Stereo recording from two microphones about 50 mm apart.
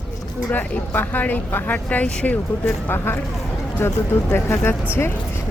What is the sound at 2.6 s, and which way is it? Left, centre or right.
A woman's voice, left.